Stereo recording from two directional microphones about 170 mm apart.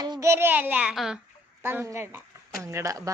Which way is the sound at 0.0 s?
20° right (ahead or behind).